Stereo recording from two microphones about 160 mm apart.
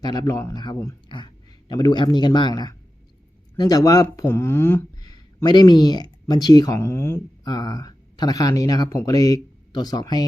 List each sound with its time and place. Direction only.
0.0 s a man's voice: 25° left (ahead or behind)